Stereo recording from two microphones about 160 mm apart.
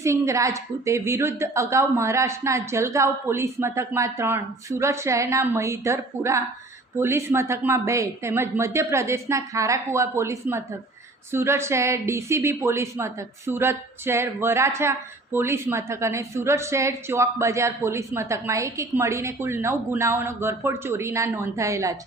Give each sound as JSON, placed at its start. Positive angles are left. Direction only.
{"t": 0.0, "sound": "a woman's voice", "side_deg": -20}